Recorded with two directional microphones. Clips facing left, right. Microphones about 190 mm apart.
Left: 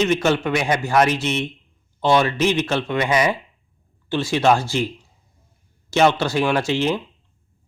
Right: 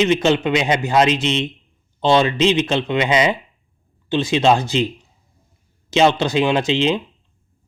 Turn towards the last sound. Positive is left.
turn(degrees=-20)  # may be behind; listen again after turning